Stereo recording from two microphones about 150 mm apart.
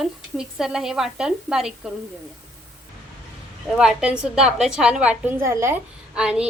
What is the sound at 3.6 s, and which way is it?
A woman's voice, centre (ahead or behind).